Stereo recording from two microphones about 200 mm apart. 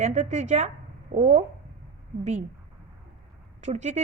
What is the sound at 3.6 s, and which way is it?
Speech, 35° right (ahead or behind).